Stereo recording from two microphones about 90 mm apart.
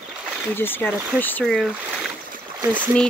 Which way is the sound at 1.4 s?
5° left (ahead or behind).